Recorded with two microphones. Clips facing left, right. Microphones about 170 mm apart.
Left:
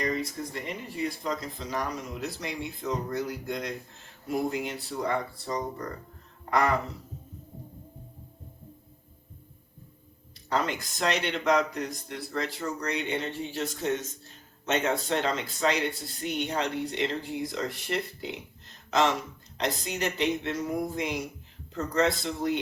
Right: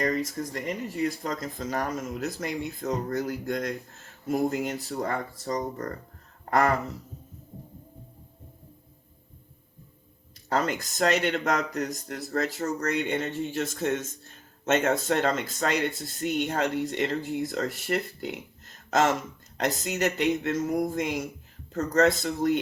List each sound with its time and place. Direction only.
0.0 s speech: 40° right (ahead or behind)
6.5 s a sound: 45° right (ahead or behind)
10.5 s speech: 45° right (ahead or behind)